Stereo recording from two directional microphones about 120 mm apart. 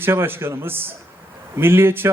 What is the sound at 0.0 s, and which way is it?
A man's voice, 20° right (ahead or behind).